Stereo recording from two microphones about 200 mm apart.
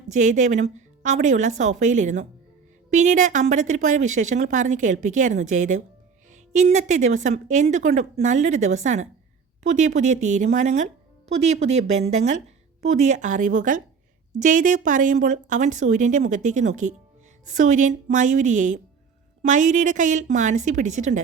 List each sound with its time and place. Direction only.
0.1 s a woman's voice: 35° right (ahead or behind)